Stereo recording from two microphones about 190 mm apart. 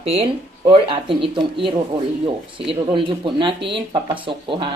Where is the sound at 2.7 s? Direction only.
25° right (ahead or behind).